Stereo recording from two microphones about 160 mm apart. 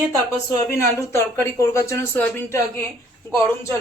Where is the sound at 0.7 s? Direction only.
15° left (ahead or behind).